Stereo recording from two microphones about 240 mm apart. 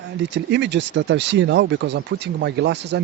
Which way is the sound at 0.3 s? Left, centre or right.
Right.